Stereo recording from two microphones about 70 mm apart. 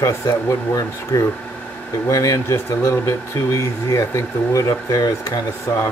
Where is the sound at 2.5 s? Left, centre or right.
Left.